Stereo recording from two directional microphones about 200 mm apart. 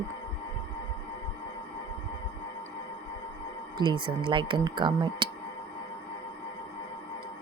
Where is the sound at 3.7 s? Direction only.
25° right (ahead or behind).